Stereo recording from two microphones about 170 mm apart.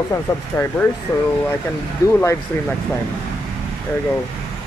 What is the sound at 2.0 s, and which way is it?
Speech, 20° left (ahead or behind).